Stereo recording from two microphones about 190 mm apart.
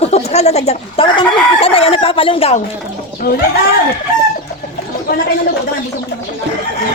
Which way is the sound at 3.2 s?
55° left (ahead or behind).